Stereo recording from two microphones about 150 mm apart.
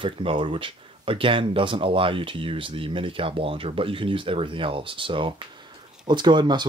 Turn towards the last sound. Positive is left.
turn(degrees=-30)  # may be behind; listen again after turning